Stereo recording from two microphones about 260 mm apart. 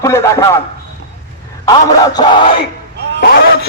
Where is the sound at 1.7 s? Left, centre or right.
Centre.